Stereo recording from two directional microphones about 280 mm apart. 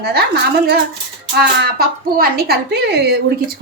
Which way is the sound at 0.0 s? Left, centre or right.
Right.